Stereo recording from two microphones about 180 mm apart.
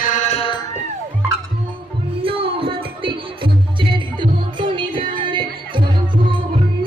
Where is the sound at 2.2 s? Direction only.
30° right (ahead or behind).